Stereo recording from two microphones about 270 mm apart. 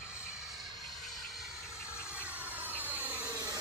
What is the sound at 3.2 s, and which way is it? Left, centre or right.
Vacuum cleaner, centre.